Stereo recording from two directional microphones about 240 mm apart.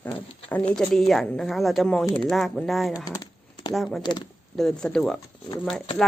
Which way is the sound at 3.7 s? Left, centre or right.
Centre.